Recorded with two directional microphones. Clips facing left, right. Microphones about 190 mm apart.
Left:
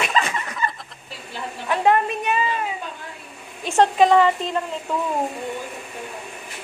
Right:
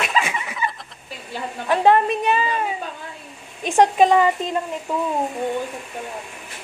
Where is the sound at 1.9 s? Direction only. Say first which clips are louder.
Right 3 dB; 30° right (ahead or behind).